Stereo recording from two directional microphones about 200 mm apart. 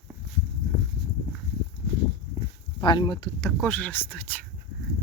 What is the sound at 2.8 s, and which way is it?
Speech, 25° left (ahead or behind).